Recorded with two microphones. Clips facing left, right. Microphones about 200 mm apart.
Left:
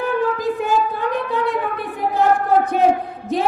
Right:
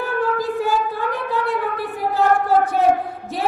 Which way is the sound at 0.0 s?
20° left (ahead or behind).